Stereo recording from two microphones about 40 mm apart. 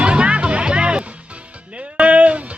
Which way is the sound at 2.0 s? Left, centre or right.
Right.